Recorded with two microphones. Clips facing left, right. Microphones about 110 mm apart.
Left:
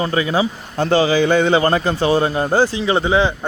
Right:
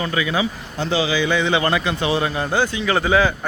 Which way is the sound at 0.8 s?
50° left (ahead or behind).